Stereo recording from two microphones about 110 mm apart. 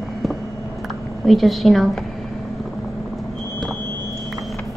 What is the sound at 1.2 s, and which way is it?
Speech, centre (ahead or behind).